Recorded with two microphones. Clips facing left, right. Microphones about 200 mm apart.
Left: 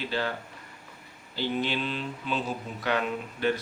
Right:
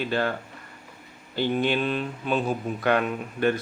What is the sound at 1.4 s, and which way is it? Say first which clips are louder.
Speech: right 5 dB; 55° right (ahead or behind).